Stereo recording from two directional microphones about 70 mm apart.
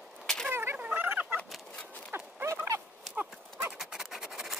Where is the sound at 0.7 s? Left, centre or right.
Right.